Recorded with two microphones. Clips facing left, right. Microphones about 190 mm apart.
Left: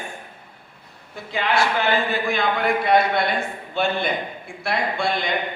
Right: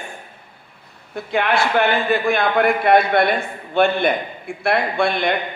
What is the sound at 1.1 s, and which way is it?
A man's voice, 55° right (ahead or behind).